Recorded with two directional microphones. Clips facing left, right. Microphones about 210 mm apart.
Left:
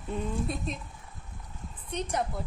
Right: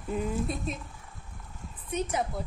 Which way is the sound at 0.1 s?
5° right (ahead or behind).